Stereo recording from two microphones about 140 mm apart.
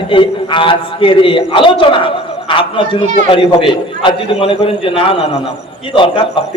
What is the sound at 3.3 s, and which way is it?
A man's voice, 40° left (ahead or behind).